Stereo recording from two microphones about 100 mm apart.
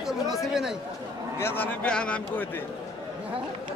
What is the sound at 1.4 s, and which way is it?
A man's voice, 20° left (ahead or behind).